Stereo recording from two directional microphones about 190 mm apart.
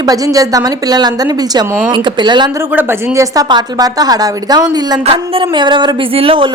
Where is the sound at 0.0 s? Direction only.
20° right (ahead or behind).